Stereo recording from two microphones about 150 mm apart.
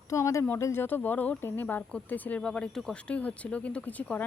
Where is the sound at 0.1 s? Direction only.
20° left (ahead or behind).